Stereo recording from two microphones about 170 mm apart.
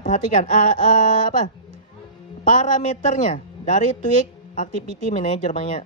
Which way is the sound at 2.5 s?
50° left (ahead or behind).